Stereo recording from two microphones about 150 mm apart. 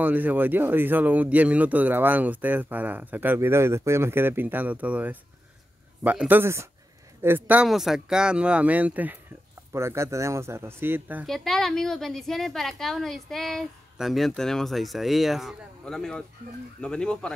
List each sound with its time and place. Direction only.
0.0 s speech: 10° right (ahead or behind)
11.2 s a woman's voice: centre (ahead or behind)